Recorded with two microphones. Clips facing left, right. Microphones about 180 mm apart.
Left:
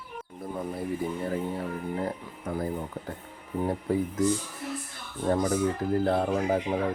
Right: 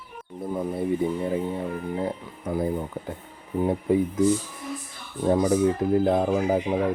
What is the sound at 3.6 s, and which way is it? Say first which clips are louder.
Speech: right 5 dB; 15° right (ahead or behind).